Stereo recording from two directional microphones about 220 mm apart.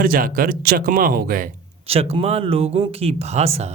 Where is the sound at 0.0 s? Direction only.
40° right (ahead or behind).